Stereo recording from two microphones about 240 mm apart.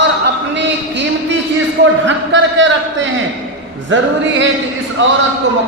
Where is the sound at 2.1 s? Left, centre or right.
Right.